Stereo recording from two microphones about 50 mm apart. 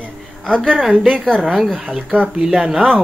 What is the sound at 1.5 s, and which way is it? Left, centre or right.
Speech, centre.